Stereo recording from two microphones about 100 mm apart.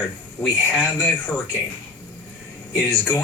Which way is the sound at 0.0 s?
15° left (ahead or behind).